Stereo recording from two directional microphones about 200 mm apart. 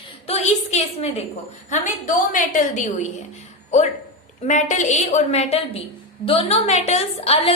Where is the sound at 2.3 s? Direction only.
40° left (ahead or behind).